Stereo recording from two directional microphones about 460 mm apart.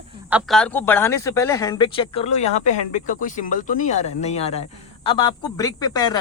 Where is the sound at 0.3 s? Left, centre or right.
Centre.